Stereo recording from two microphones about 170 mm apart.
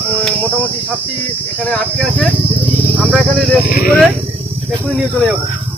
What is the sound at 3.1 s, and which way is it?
Speech, 5° left (ahead or behind).